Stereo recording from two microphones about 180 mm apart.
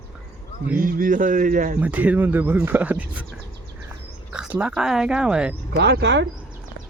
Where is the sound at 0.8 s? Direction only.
50° right (ahead or behind).